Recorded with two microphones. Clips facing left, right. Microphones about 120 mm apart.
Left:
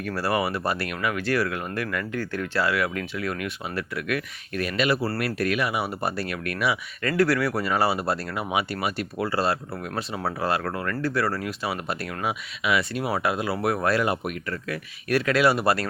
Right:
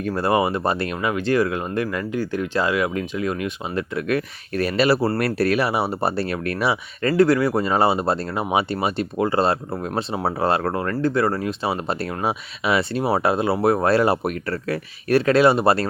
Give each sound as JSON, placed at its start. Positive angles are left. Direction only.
{"t": 0.0, "sound": "speech", "side_deg": -25}